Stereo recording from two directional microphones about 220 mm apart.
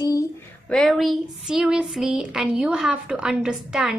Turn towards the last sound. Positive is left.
turn(degrees=-5)  # may be behind; listen again after turning